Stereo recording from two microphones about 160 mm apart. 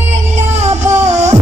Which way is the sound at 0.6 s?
45° right (ahead or behind).